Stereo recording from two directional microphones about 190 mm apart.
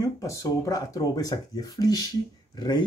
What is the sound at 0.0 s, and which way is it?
Speech, 15° left (ahead or behind).